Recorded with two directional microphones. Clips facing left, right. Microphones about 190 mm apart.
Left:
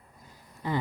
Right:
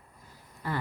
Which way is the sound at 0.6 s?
20° left (ahead or behind).